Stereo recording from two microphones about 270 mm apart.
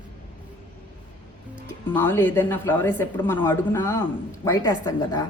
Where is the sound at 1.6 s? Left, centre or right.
Centre.